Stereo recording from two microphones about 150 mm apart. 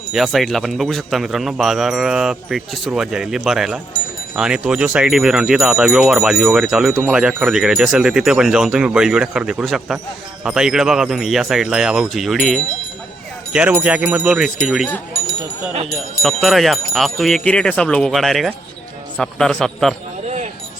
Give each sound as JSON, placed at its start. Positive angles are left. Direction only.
{"t": 0.1, "sound": "speech", "side_deg": 0}
{"t": 15.9, "sound": "speech", "side_deg": 0}
{"t": 20.2, "sound": "a sound", "side_deg": -50}